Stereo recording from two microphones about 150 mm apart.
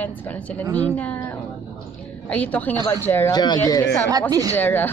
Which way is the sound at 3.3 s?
25° left (ahead or behind).